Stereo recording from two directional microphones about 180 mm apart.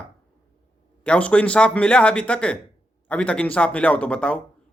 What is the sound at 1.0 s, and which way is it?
Speech, 5° left (ahead or behind).